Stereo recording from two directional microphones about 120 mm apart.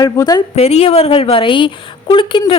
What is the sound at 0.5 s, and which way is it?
A woman's voice, 60° left (ahead or behind).